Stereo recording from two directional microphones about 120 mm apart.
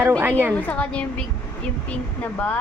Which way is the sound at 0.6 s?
15° left (ahead or behind).